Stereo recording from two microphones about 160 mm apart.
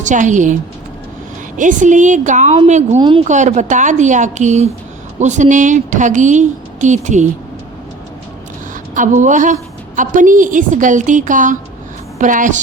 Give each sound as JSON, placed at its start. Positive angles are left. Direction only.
{"t": 0.0, "sound": "a woman's voice", "side_deg": -50}
{"t": 1.5, "sound": "a woman's voice", "side_deg": -50}
{"t": 3.0, "sound": "speech", "side_deg": -30}
{"t": 3.2, "sound": "a woman's voice", "side_deg": -50}
{"t": 9.0, "sound": "a woman's voice", "side_deg": -50}